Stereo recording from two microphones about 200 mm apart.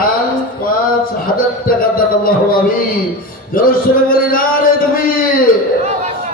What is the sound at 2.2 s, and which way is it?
Music, 45° left (ahead or behind).